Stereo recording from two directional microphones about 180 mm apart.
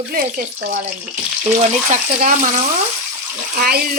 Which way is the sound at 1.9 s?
45° right (ahead or behind).